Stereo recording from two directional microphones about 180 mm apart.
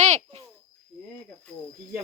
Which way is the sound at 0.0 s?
40° right (ahead or behind).